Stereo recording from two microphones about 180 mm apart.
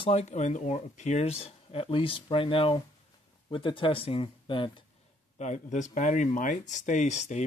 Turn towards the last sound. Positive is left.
turn(degrees=40)  # may be behind; listen again after turning